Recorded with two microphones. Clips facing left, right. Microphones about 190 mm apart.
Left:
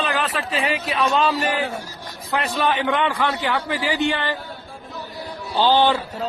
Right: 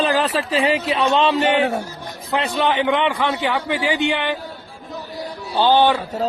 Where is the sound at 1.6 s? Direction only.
55° right (ahead or behind).